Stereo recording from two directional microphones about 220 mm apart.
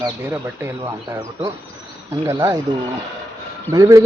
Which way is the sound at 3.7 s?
15° right (ahead or behind).